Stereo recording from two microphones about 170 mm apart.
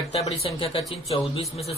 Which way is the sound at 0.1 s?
35° left (ahead or behind).